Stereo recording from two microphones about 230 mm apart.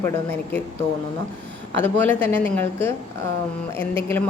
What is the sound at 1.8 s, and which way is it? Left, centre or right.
A woman's voice, centre.